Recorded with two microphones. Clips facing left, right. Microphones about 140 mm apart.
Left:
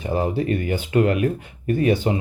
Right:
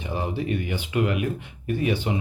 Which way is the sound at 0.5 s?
45° left (ahead or behind).